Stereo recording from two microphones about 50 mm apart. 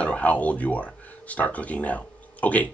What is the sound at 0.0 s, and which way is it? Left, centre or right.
Speech, left.